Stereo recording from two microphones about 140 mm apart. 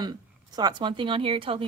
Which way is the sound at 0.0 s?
30° right (ahead or behind).